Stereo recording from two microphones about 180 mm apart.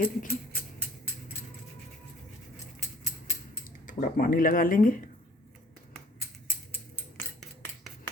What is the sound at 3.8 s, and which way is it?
Speech, 50° left (ahead or behind).